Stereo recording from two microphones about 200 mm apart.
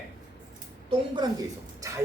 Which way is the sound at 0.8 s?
20° right (ahead or behind).